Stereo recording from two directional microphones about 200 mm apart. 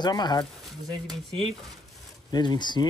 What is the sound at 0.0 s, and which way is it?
Speech, 20° left (ahead or behind).